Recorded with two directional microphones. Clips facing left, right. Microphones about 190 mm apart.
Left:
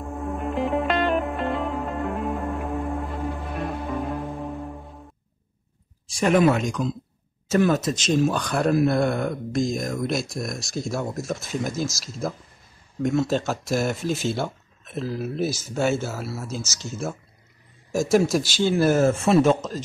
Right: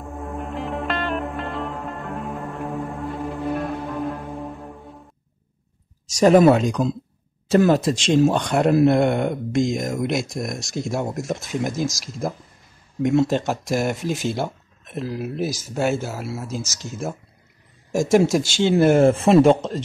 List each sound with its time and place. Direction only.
0.2 s music: centre (ahead or behind)
6.0 s speech: 40° right (ahead or behind); by 12.4 s 15° right (ahead or behind)
13.0 s speech: 25° right (ahead or behind)
13.3 s speech: 15° right (ahead or behind)
18.0 s speech: 20° right (ahead or behind)